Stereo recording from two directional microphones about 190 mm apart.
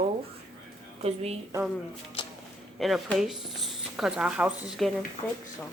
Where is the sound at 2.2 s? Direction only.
25° left (ahead or behind).